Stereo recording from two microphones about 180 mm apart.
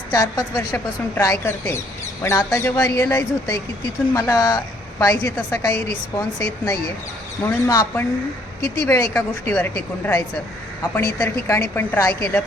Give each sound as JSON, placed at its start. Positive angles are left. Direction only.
{"t": 0.1, "sound": "a woman's voice", "side_deg": 20}